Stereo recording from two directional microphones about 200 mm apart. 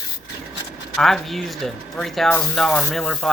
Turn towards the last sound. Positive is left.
turn(degrees=5)  # may be behind; listen again after turning